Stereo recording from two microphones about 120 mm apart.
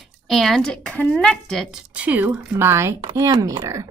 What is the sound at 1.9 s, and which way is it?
Speech, 10° right (ahead or behind).